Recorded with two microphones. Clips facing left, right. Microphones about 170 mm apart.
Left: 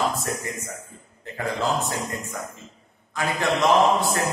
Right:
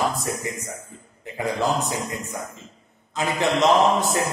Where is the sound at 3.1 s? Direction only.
20° right (ahead or behind).